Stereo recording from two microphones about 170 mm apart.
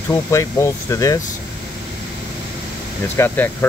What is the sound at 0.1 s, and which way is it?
Speech, 15° left (ahead or behind).